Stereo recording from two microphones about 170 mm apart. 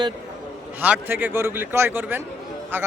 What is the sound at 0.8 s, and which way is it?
A man's voice, 10° right (ahead or behind).